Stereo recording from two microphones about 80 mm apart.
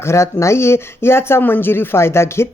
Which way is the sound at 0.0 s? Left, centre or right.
Left.